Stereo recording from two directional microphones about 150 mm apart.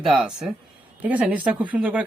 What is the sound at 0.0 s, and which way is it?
Speech, 5° right (ahead or behind).